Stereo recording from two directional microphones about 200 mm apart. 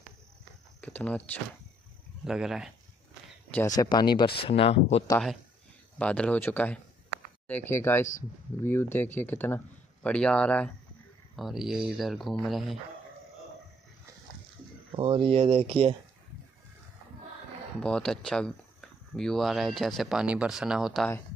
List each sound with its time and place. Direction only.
0.7 s speech: 5° left (ahead or behind)
3.5 s speech: 15° left (ahead or behind)
5.9 s speech: 5° left (ahead or behind)
14.9 s speech: 25° right (ahead or behind)
17.8 s speech: 5° left (ahead or behind)